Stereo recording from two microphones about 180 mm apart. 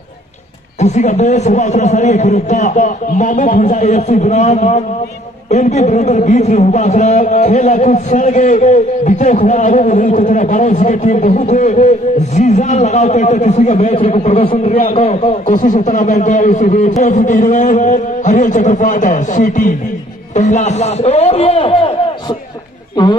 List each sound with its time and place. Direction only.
0.7 s a man's voice: 40° left (ahead or behind)